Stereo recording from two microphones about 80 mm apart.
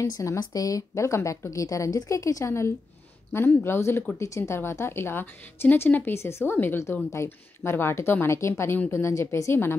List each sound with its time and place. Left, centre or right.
0.0 s a woman's voice: left
0.4 s a woman's voice: left